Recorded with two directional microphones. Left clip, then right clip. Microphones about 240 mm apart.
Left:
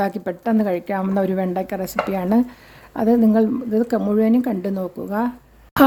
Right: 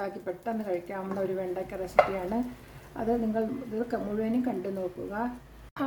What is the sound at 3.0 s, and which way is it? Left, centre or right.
A woman's voice, left.